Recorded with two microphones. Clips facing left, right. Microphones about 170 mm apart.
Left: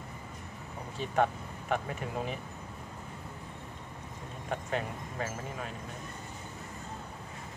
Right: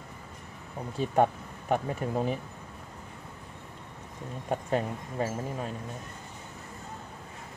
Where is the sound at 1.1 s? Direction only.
40° right (ahead or behind).